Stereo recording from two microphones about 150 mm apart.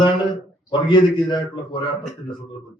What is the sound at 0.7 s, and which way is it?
A man's voice, 30° left (ahead or behind).